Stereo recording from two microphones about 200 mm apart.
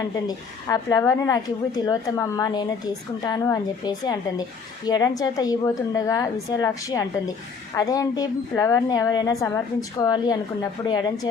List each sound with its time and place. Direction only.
0.0 s a woman's voice: 20° left (ahead or behind)